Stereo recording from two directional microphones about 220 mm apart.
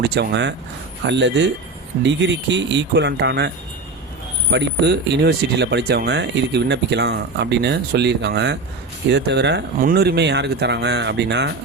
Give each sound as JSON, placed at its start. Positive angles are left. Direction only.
{"t": 0.0, "sound": "speech", "side_deg": -50}
{"t": 4.5, "sound": "speech", "side_deg": -50}